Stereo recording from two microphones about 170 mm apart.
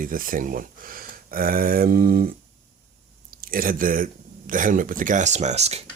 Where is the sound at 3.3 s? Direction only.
60° right (ahead or behind).